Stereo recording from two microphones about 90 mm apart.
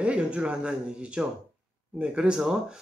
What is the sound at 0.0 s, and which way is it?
Speech, 10° right (ahead or behind).